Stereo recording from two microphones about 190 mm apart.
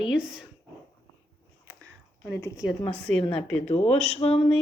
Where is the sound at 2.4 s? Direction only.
15° left (ahead or behind).